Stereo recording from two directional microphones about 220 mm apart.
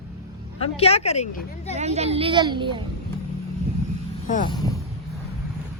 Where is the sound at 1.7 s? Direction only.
30° right (ahead or behind).